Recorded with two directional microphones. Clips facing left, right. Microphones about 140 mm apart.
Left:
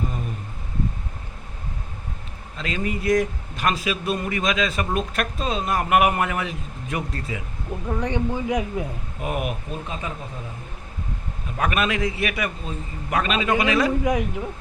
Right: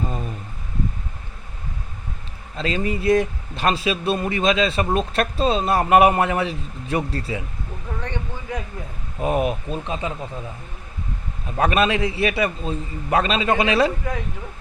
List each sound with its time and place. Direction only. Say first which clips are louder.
2.6 s speech: right 3 dB; 30° right (ahead or behind)
7.7 s speech: left 6 dB; 15° left (ahead or behind)
9.2 s speech: right 6 dB; 30° right (ahead or behind)
11.5 s speech: right 4 dB; 30° right (ahead or behind)
14.0 s speech: left 6 dB; 15° left (ahead or behind)